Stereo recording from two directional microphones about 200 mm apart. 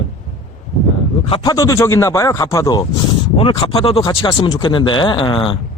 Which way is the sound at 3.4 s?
30° left (ahead or behind).